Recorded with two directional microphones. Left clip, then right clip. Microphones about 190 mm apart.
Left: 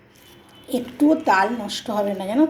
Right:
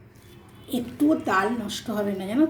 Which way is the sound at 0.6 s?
25° right (ahead or behind).